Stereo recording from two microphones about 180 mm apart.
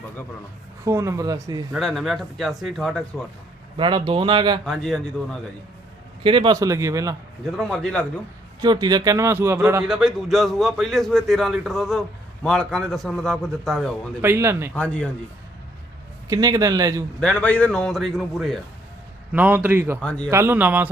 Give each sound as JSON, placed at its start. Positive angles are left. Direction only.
{"t": 0.9, "sound": "speech", "side_deg": -15}
{"t": 1.7, "sound": "a man's voice", "side_deg": 0}
{"t": 3.8, "sound": "speech", "side_deg": -25}
{"t": 4.6, "sound": "a man's voice", "side_deg": 0}
{"t": 6.2, "sound": "speech", "side_deg": -25}
{"t": 7.5, "sound": "a man's voice", "side_deg": 0}
{"t": 8.6, "sound": "speech", "side_deg": -25}
{"t": 9.8, "sound": "a man's voice", "side_deg": 0}
{"t": 14.2, "sound": "speech", "side_deg": -15}
{"t": 14.8, "sound": "a man's voice", "side_deg": 5}
{"t": 16.3, "sound": "speech", "side_deg": -20}
{"t": 17.2, "sound": "a man's voice", "side_deg": 5}
{"t": 20.0, "sound": "speech", "side_deg": 5}
{"t": 20.3, "sound": "speech", "side_deg": -15}